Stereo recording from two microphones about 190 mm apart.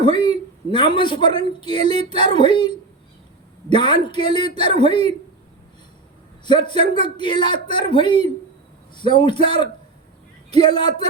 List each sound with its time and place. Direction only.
0.0 s a man's voice: 25° left (ahead or behind)
6.4 s a man's voice: 25° left (ahead or behind)